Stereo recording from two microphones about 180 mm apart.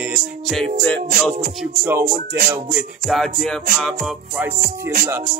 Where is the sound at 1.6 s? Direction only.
10° right (ahead or behind).